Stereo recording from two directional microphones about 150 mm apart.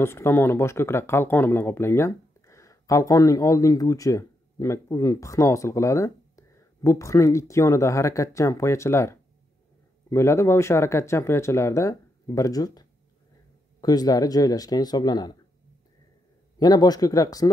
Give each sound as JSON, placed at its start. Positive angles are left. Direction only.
{"t": 0.0, "sound": "speech", "side_deg": 15}
{"t": 16.5, "sound": "speech", "side_deg": 25}